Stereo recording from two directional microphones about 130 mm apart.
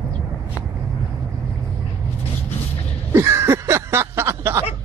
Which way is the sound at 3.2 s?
20° right (ahead or behind).